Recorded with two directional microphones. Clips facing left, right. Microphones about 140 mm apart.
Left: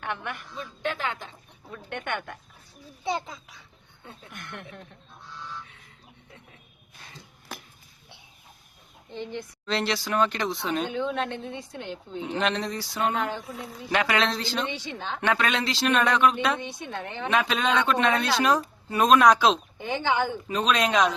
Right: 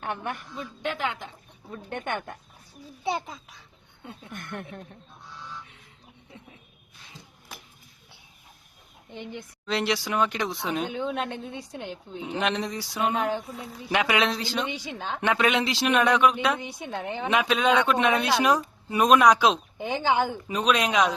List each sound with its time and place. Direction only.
0.0 s a woman's voice: 35° right (ahead or behind)
0.5 s a woman's voice: 15° right (ahead or behind)
1.7 s a woman's voice: 30° right (ahead or behind)
3.0 s a woman's voice: 10° right (ahead or behind)
4.4 s speech: 45° right (ahead or behind)
9.3 s a woman's voice: 10° right (ahead or behind)
12.2 s a woman's voice: 15° right (ahead or behind)
13.4 s speech: centre (ahead or behind)
13.9 s a woman's voice: 15° right (ahead or behind)